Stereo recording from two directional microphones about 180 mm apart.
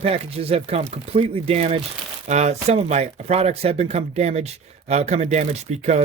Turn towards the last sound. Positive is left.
turn(degrees=-40)  # may be behind; listen again after turning